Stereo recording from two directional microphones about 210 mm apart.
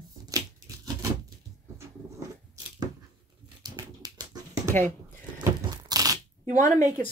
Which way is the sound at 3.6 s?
20° right (ahead or behind).